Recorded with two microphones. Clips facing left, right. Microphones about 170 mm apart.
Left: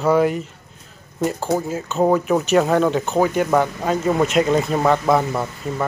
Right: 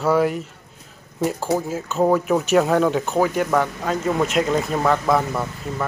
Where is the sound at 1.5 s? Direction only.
5° right (ahead or behind).